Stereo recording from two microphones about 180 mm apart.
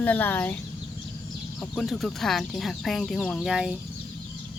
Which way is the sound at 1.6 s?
Centre (ahead or behind).